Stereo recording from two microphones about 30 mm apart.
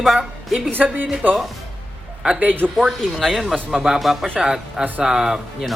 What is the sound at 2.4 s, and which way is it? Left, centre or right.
Speech, right.